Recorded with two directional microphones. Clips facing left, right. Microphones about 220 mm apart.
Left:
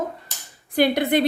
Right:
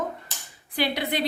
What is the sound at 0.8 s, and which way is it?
Speech, 50° left (ahead or behind).